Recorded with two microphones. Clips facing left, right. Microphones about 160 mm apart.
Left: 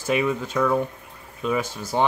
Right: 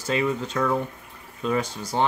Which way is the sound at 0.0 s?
15° left (ahead or behind).